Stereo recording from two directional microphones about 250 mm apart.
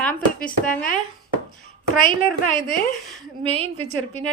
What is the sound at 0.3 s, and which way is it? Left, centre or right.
Speech, left.